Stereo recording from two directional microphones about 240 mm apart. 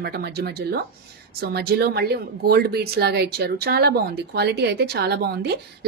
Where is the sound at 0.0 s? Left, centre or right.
Right.